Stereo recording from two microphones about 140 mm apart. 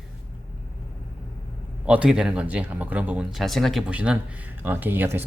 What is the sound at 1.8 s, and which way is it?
Speech, 5° right (ahead or behind).